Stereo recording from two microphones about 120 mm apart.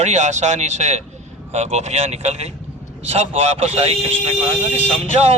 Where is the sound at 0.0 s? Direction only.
70° right (ahead or behind).